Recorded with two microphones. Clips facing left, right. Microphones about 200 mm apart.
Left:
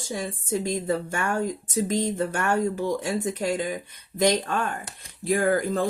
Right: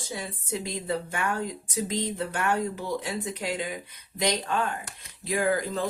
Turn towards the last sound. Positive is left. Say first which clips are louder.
# left 3 dB
turn(degrees=50)  # may be behind; listen again after turning